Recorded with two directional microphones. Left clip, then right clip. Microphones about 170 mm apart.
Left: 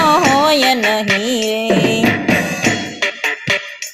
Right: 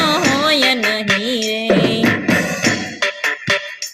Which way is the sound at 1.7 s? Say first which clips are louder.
Right 1 dB; 40° right (ahead or behind).